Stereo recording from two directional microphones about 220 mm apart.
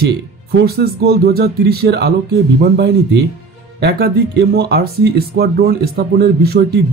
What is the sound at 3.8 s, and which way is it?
Speech, 45° right (ahead or behind).